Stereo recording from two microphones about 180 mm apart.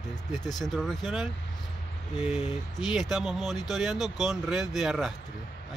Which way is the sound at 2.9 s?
Centre (ahead or behind).